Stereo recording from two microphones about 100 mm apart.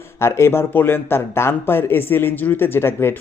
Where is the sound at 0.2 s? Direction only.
25° left (ahead or behind).